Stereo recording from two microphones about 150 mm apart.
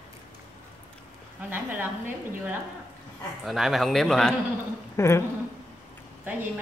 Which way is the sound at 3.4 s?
Centre (ahead or behind).